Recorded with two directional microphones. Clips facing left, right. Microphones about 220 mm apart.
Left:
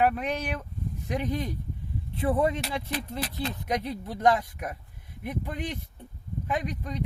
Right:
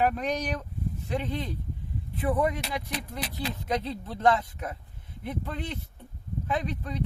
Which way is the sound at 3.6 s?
15° left (ahead or behind).